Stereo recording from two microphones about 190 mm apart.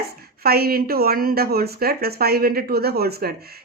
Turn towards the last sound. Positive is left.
turn(degrees=-55)  # may be behind; listen again after turning